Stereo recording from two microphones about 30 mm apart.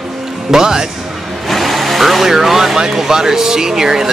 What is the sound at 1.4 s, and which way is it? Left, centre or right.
Speech, centre.